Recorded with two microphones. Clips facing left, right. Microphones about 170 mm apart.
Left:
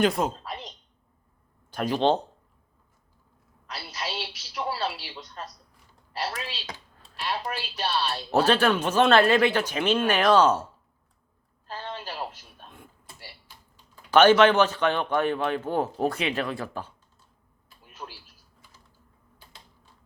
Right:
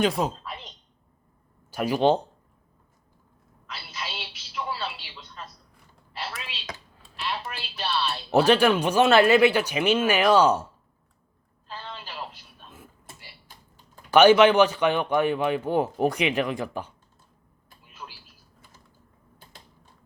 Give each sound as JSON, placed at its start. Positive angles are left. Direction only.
{"t": 0.0, "sound": "a woman's voice", "side_deg": 0}
{"t": 0.4, "sound": "a sound", "side_deg": 40}
{"t": 1.7, "sound": "speech", "side_deg": -10}
{"t": 3.7, "sound": "telephone", "side_deg": 40}
{"t": 6.1, "sound": "a sound", "side_deg": 40}
{"t": 7.2, "sound": "music", "side_deg": 40}
{"t": 8.3, "sound": "speech", "side_deg": -15}
{"t": 11.7, "sound": "a sound", "side_deg": 45}
{"t": 14.1, "sound": "speech", "side_deg": -10}
{"t": 18.0, "sound": "typing", "side_deg": 35}